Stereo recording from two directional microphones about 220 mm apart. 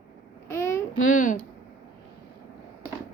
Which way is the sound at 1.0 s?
35° left (ahead or behind).